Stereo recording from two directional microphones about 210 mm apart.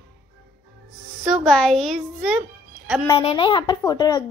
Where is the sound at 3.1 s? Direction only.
25° left (ahead or behind).